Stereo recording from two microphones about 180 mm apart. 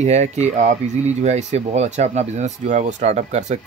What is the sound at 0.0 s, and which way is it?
Speech, 40° right (ahead or behind).